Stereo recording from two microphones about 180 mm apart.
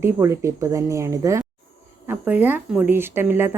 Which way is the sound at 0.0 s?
15° right (ahead or behind).